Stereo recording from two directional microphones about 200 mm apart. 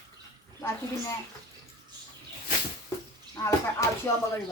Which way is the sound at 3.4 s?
15° left (ahead or behind).